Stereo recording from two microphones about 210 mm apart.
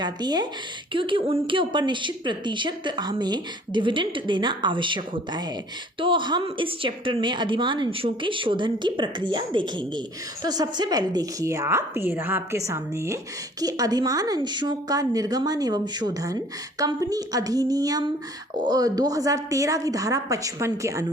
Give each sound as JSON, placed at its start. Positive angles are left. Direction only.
{"t": 0.0, "sound": "a woman's voice", "side_deg": -20}